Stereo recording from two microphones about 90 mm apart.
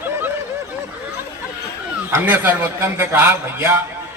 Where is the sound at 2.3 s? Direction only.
20° right (ahead or behind).